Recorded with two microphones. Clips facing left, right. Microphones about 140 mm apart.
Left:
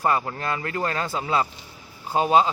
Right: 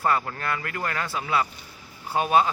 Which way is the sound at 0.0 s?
20° left (ahead or behind).